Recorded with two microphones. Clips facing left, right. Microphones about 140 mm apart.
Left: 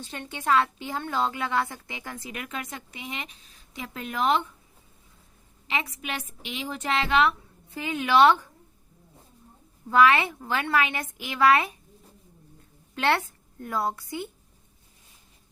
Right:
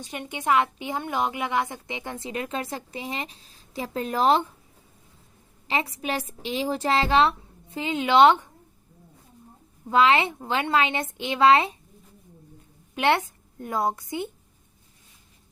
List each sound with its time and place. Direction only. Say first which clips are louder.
0.0 s a woman's voice: right 2 dB; 15° right (ahead or behind); by 4.4 s 35° right (ahead or behind)
5.6 s a woman's voice: right 4 dB; 35° right (ahead or behind)
9.9 s a woman's voice: even; 25° right (ahead or behind)
12.9 s a woman's voice: right 3 dB; 20° right (ahead or behind)